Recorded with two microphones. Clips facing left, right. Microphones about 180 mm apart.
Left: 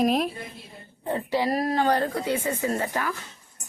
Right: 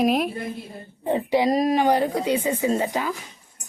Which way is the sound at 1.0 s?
20° right (ahead or behind).